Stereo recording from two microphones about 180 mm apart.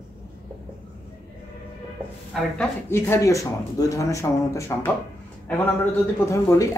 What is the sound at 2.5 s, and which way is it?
Speech, 15° left (ahead or behind).